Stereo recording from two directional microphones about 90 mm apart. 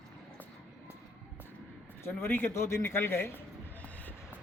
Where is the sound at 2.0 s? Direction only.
25° left (ahead or behind).